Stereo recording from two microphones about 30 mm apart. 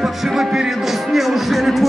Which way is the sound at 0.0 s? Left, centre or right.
Centre.